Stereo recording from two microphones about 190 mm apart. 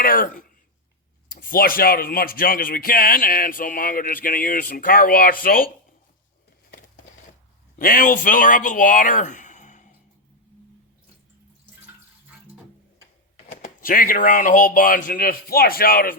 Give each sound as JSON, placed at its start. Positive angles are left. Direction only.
{"t": 0.0, "sound": "speech", "side_deg": 50}
{"t": 7.8, "sound": "speech", "side_deg": 45}
{"t": 13.5, "sound": "speech", "side_deg": 45}